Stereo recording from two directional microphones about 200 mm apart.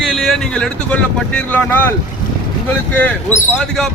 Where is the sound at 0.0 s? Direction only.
Centre (ahead or behind).